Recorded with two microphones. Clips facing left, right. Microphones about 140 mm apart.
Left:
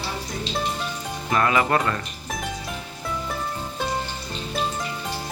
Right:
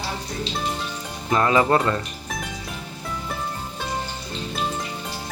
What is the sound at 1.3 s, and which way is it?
Speech, 25° right (ahead or behind).